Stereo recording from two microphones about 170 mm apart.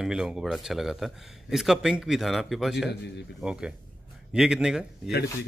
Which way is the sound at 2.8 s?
85° left.